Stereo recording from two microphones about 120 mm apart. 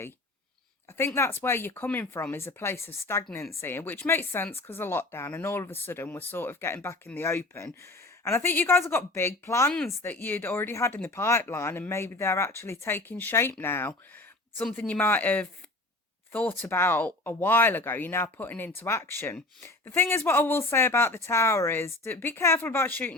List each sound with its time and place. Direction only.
0.9 s speech: 20° left (ahead or behind)